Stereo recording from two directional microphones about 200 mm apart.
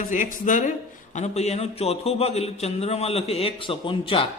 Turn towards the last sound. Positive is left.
turn(degrees=25)  # may be behind; listen again after turning